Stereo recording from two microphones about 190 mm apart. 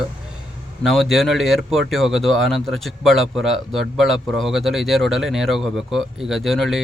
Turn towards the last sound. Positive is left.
turn(degrees=0)  # may be behind; listen again after turning